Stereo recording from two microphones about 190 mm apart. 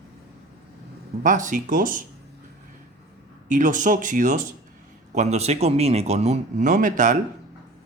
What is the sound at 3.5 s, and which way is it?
A man's voice, 40° right (ahead or behind).